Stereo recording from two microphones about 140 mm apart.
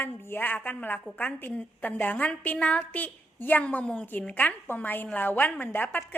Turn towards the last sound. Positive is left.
turn(degrees=15)  # may be behind; listen again after turning